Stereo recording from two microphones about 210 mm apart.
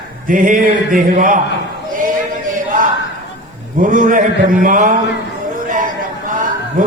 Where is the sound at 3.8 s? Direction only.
40° right (ahead or behind).